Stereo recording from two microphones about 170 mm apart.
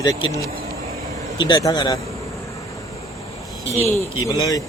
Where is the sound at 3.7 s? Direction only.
15° left (ahead or behind).